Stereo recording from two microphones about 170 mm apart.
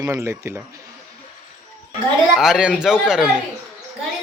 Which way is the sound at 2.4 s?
5° right (ahead or behind).